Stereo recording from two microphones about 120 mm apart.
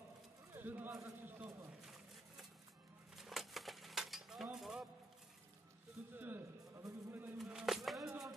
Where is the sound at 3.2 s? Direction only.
Centre (ahead or behind).